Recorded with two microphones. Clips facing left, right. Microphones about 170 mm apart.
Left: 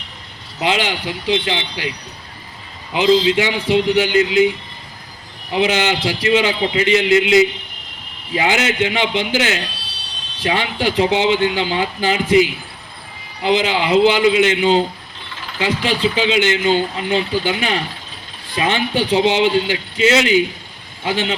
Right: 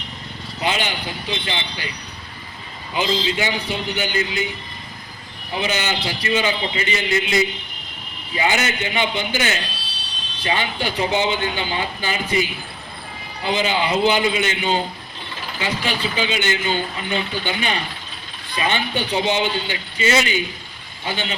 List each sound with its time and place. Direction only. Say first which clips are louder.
0.6 s speech: left 4 dB; 90° left
2.9 s speech: left 8 dB; 90° left
5.5 s speech: left 7 dB; 90° left